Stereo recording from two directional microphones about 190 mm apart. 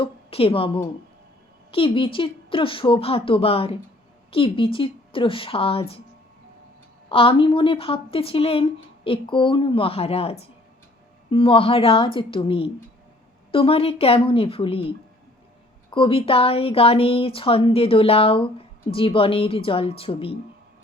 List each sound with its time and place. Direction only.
0.0 s speech: 30° left (ahead or behind)
7.1 s speech: 30° left (ahead or behind)